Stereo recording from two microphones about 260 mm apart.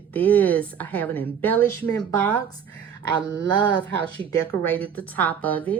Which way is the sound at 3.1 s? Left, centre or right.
Centre.